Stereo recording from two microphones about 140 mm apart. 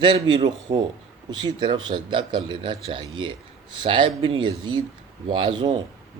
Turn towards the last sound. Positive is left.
turn(degrees=-35)  # may be behind; listen again after turning